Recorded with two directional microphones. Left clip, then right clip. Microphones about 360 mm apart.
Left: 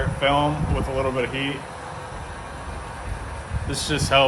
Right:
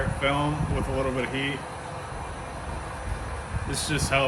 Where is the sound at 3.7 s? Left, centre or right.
Centre.